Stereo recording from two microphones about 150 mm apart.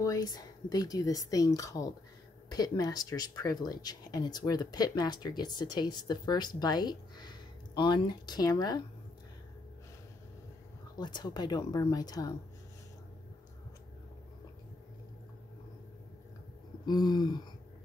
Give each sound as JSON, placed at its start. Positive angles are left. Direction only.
{"t": 0.0, "sound": "speech", "side_deg": 25}
{"t": 11.0, "sound": "speech", "side_deg": 30}
{"t": 16.8, "sound": "speech", "side_deg": 25}